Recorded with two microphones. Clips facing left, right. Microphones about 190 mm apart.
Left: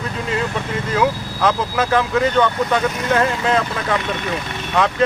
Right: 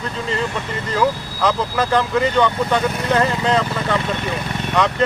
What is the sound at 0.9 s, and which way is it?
Speech, 5° left (ahead or behind).